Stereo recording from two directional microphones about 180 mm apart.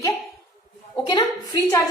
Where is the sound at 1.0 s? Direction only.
25° left (ahead or behind).